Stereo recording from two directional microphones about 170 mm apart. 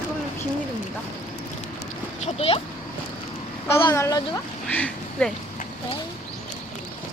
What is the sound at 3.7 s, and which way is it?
Speech, 20° left (ahead or behind).